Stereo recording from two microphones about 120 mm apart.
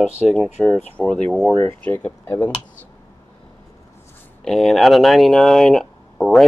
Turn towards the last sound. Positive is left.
turn(degrees=5)  # may be behind; listen again after turning